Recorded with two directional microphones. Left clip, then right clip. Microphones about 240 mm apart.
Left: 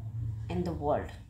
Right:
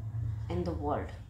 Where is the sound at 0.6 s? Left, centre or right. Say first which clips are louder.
Left 4 dB; left.